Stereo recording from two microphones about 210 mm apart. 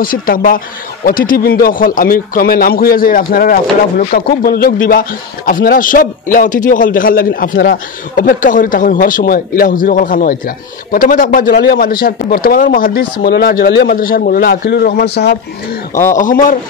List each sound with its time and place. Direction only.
0.0 s a man's voice: 45° left (ahead or behind)
16.2 s a man's voice: 40° left (ahead or behind)